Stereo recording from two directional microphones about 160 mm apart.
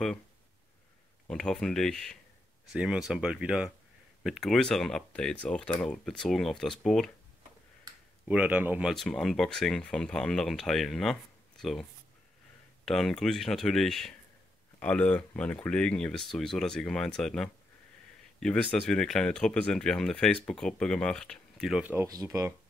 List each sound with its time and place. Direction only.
1.2 s speech: 5° left (ahead or behind)
8.3 s speech: 10° right (ahead or behind)
21.8 s speech: 20° right (ahead or behind)